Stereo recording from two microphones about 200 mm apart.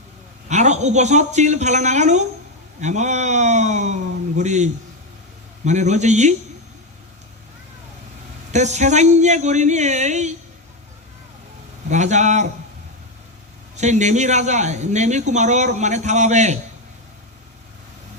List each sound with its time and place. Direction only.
0.4 s speech: 35° right (ahead or behind)
8.5 s speech: 35° right (ahead or behind)
11.9 s speech: 35° right (ahead or behind)
13.7 s speech: 35° right (ahead or behind)